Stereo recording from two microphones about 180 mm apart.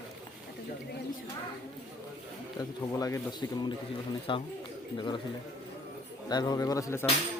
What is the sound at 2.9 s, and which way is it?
Speech, 20° left (ahead or behind).